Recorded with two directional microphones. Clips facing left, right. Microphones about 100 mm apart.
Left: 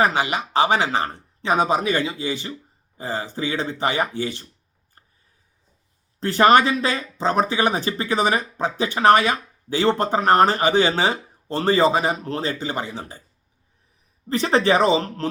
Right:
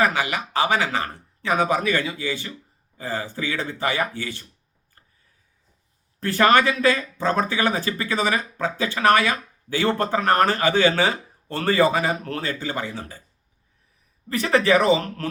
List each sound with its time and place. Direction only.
0.0 s speech: 25° left (ahead or behind)
6.1 s speech: 20° left (ahead or behind)
14.3 s speech: 25° left (ahead or behind)